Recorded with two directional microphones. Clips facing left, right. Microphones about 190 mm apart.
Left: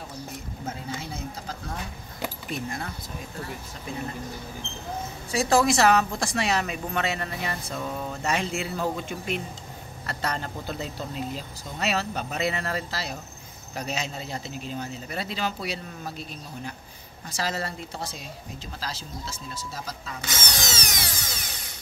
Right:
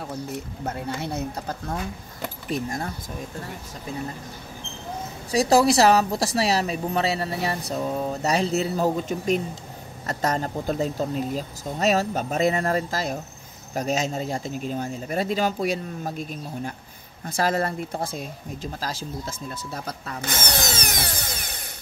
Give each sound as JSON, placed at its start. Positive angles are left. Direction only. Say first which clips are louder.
{"t": 0.7, "sound": "a woman's voice", "louder": "right 5 dB", "side_deg": -65}
{"t": 2.5, "sound": "a woman's voice", "louder": "right 7 dB", "side_deg": -40}
{"t": 5.3, "sound": "a woman's voice", "louder": "right 4 dB", "side_deg": -35}